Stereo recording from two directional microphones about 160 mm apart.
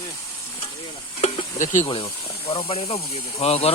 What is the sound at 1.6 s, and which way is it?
Speech, 50° left (ahead or behind).